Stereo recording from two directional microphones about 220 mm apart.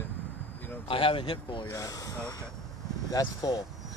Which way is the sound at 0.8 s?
25° left (ahead or behind).